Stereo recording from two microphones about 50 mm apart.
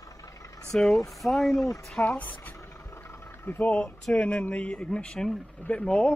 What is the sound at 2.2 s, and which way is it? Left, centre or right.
Speech, left.